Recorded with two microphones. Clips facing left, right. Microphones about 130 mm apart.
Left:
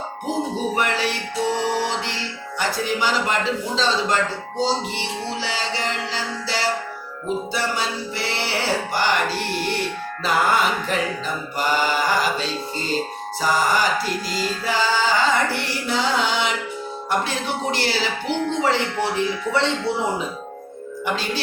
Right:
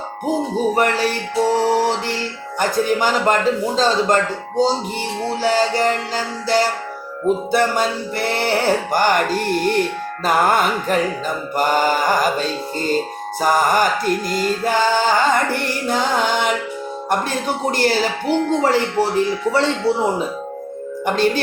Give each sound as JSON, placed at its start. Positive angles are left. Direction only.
{"t": 0.7, "sound": "music", "side_deg": -45}
{"t": 21.0, "sound": "music", "side_deg": -50}